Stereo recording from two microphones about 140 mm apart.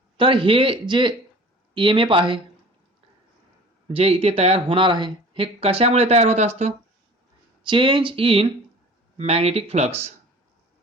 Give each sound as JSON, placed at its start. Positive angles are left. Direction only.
{"t": 0.2, "sound": "speech", "side_deg": -40}
{"t": 3.8, "sound": "speech", "side_deg": -45}
{"t": 7.6, "sound": "speech", "side_deg": -35}